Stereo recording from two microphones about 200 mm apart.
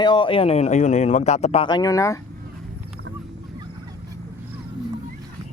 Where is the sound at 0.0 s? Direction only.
25° left (ahead or behind).